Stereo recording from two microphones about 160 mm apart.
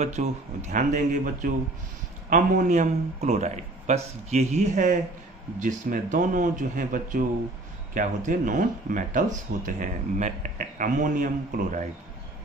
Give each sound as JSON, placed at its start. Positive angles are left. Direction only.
{"t": 0.0, "sound": "speech", "side_deg": -45}